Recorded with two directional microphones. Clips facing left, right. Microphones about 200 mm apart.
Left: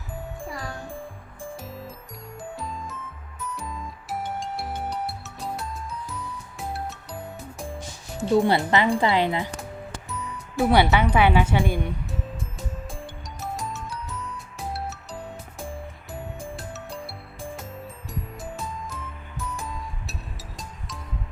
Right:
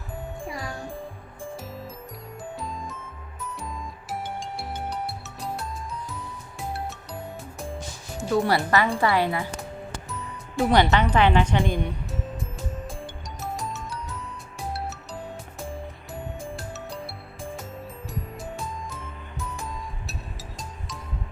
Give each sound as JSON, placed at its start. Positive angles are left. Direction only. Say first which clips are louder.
{"t": 1.6, "sound": "music", "louder": "right 1 dB", "side_deg": 0}
{"t": 8.2, "sound": "speech", "louder": "left 3 dB", "side_deg": 20}
{"t": 10.1, "sound": "speech", "louder": "left 2 dB", "side_deg": 0}
{"t": 13.4, "sound": "music", "louder": "even", "side_deg": 0}
{"t": 18.1, "sound": "music", "louder": "even", "side_deg": 0}